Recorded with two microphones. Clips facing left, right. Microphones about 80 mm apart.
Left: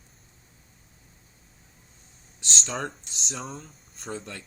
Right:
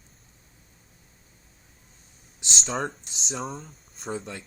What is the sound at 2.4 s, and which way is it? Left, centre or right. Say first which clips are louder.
Speech: right 1 dB; centre.